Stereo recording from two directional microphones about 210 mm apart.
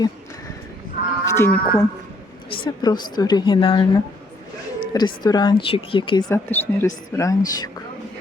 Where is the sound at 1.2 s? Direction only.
15° left (ahead or behind).